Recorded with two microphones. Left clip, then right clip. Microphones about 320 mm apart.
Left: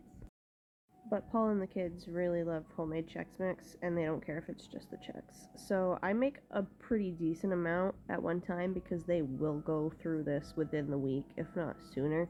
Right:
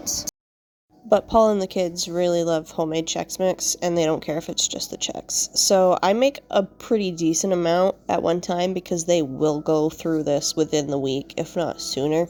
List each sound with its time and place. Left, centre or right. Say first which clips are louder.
1.1 s speech: right 17 dB; centre